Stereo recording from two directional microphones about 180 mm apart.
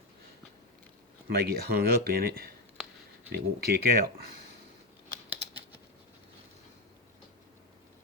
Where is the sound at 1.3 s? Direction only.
60° right (ahead or behind).